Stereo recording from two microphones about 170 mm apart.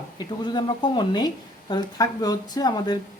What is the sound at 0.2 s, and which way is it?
A woman's voice, 25° left (ahead or behind).